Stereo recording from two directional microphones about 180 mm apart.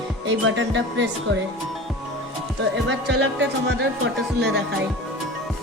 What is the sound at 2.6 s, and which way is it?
Speech, 70° right (ahead or behind).